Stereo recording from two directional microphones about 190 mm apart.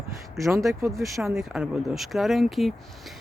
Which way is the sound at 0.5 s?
15° right (ahead or behind).